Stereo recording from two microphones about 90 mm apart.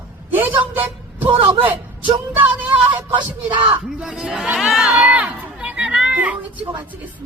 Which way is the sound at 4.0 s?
5° right (ahead or behind).